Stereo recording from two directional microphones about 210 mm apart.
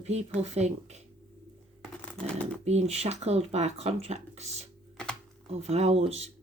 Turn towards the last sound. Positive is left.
turn(degrees=-30)  # may be behind; listen again after turning